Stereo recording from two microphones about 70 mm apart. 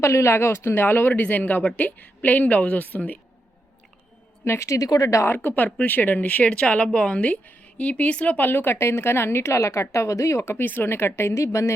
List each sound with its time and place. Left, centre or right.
0.0 s a woman's voice: left
4.4 s a woman's voice: left
5.2 s speech: left